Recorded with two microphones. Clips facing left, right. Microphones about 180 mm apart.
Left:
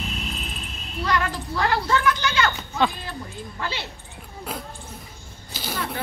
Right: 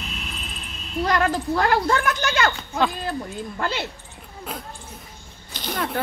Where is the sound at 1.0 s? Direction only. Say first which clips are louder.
Right 4 dB; 45° right (ahead or behind).